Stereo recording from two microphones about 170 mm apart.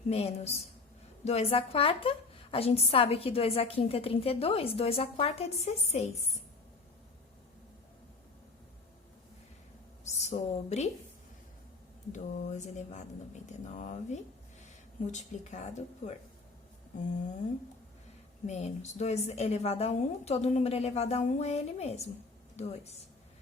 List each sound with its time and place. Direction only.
0.1 s a woman's voice: 35° left (ahead or behind)
10.0 s a woman's voice: 40° left (ahead or behind)
12.1 s speech: 45° left (ahead or behind)
18.4 s a woman's voice: 40° left (ahead or behind)